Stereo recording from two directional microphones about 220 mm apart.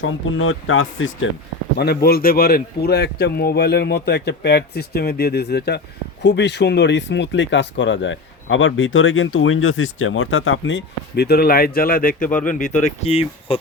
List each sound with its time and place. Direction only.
0.0 s speech: 65° left (ahead or behind)
1.8 s speech: 45° left (ahead or behind); by 13.6 s 25° left (ahead or behind)